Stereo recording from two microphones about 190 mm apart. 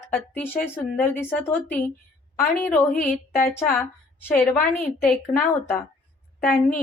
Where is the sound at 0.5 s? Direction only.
50° left (ahead or behind).